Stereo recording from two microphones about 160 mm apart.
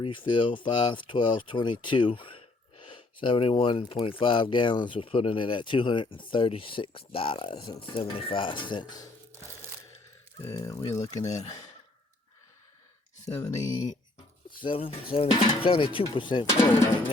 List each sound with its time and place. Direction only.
0.0 s speech: 30° left (ahead or behind)
10.5 s speech: 20° left (ahead or behind)
11.3 s speech: 45° left (ahead or behind)
13.2 s speech: 20° left (ahead or behind)
14.6 s speech: 35° left (ahead or behind)